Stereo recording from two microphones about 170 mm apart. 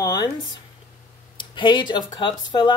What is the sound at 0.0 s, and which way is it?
Speech, 25° left (ahead or behind).